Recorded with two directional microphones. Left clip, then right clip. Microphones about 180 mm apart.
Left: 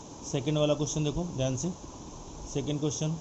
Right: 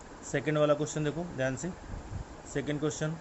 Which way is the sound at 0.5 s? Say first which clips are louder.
Right 1 dB; 90° right.